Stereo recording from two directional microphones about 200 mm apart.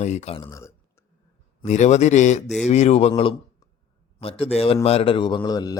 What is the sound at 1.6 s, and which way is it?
A man's voice, 35° left (ahead or behind).